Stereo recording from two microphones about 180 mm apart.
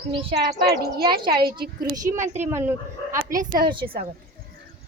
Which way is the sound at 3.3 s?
50° right (ahead or behind).